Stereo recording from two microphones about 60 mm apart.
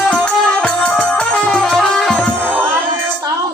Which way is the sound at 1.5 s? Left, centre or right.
Centre.